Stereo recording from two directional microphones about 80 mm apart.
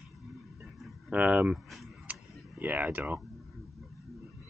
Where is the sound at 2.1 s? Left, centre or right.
Right.